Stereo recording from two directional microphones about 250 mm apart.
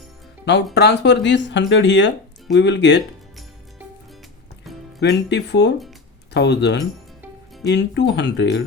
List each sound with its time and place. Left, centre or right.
0.4 s speech: left
4.9 s speech: left